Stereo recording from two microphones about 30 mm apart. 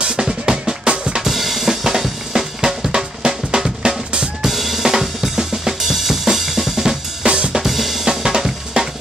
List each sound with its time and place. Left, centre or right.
0.0 s drum: right
1.3 s drum kit: centre
3.2 s music: right
4.4 s drum kit: centre
7.2 s drum kit: right
7.6 s drum kit: centre